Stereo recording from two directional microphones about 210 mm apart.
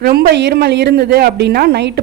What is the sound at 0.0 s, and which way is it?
Speech, 50° right (ahead or behind).